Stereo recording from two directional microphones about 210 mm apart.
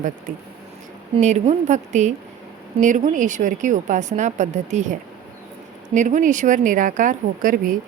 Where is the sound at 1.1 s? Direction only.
35° right (ahead or behind).